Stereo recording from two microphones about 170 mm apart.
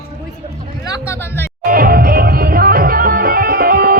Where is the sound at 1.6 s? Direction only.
60° right (ahead or behind).